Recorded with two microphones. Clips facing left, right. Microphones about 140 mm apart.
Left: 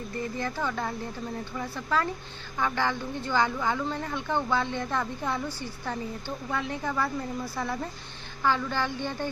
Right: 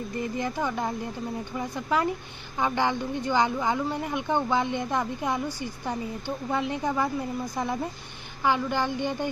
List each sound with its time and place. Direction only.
0.1 s speech: 15° right (ahead or behind)